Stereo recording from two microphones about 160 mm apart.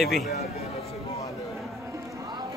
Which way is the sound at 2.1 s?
25° right (ahead or behind).